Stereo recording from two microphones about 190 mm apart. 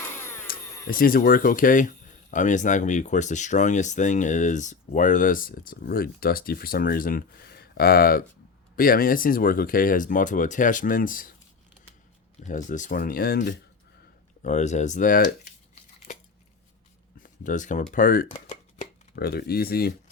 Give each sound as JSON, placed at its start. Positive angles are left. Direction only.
{"t": 0.4, "sound": "speech", "side_deg": 50}
{"t": 12.4, "sound": "speech", "side_deg": 40}
{"t": 14.4, "sound": "speech", "side_deg": 40}
{"t": 17.2, "sound": "a sound", "side_deg": 45}
{"t": 19.1, "sound": "speech", "side_deg": 55}